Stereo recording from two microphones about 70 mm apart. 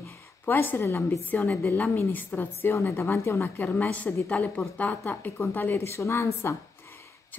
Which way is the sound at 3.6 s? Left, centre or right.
Left.